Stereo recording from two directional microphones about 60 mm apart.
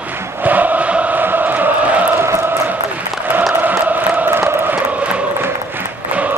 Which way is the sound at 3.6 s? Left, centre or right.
Right.